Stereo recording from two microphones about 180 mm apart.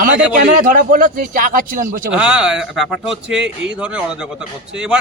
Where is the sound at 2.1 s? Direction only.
5° right (ahead or behind).